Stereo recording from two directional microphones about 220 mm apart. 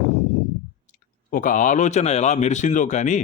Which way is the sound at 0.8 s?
35° left (ahead or behind).